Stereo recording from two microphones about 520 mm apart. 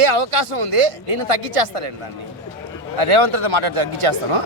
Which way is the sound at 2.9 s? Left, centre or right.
Right.